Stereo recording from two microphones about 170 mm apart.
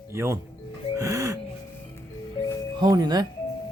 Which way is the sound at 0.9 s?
20° right (ahead or behind).